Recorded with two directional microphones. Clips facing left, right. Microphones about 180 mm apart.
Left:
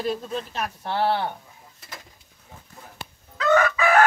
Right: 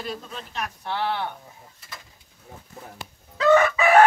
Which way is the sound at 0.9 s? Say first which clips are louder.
Left 4 dB; 35° left (ahead or behind).